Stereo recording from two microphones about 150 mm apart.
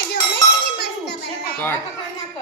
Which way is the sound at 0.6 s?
90° left.